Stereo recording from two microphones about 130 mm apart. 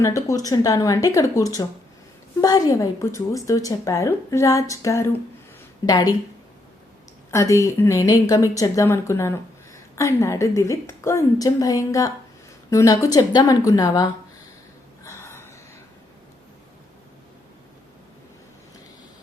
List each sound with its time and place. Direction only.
0.0 s a woman's voice: 25° left (ahead or behind)
7.3 s a woman's voice: 25° left (ahead or behind)
15.0 s gasp: 20° left (ahead or behind)